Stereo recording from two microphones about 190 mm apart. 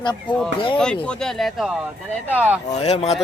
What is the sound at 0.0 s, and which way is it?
Speech, 25° left (ahead or behind).